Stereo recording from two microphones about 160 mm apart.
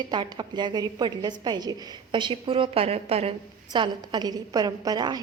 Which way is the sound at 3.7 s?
25° right (ahead or behind).